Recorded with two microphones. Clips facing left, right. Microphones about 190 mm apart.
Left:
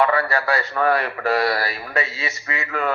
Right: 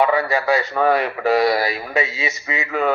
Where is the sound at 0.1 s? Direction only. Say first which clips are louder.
Right 3 dB; 15° right (ahead or behind).